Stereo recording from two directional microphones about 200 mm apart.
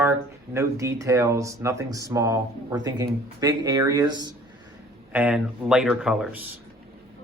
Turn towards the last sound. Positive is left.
turn(degrees=-5)  # may be behind; listen again after turning